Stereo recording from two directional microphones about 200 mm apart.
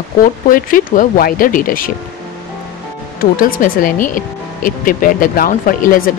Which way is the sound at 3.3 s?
45° left (ahead or behind).